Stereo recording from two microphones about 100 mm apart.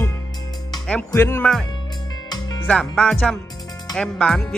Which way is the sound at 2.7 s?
5° left (ahead or behind).